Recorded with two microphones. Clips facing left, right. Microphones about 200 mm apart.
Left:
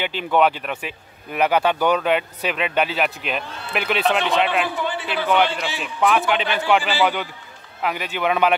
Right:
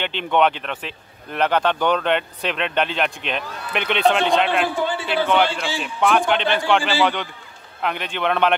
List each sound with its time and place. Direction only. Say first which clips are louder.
0.0 s a man's voice: even; 5° left (ahead or behind)
4.8 s a sound: right 3 dB; 30° right (ahead or behind)
5.3 s a man's voice: left 2 dB; 5° left (ahead or behind)